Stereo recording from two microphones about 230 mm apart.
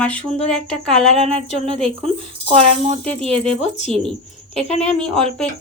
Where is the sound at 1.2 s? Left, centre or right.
Right.